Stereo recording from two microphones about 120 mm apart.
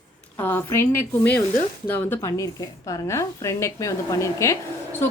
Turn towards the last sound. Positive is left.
turn(degrees=20)  # may be behind; listen again after turning